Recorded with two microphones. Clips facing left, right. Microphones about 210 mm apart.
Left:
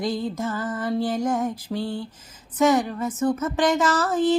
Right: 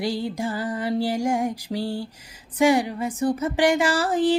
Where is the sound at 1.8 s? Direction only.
35° right (ahead or behind).